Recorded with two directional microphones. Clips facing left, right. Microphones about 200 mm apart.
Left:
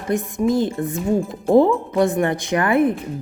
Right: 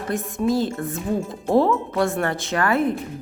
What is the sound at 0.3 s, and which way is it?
Speech, 15° left (ahead or behind).